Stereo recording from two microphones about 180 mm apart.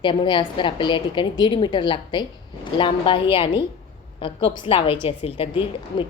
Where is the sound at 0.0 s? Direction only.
25° left (ahead or behind).